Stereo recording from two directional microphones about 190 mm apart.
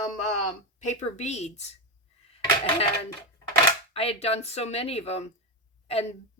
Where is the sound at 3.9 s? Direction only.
30° left (ahead or behind).